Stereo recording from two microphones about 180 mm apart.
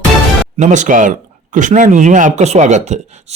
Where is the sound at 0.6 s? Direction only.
40° right (ahead or behind).